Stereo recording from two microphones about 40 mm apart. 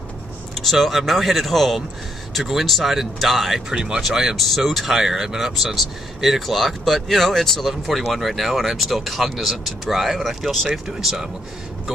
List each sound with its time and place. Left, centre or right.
0.6 s speech: centre
3.7 s speech: centre
4.4 s speech: centre